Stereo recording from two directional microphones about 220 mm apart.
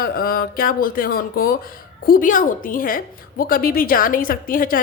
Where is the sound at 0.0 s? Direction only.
40° left (ahead or behind).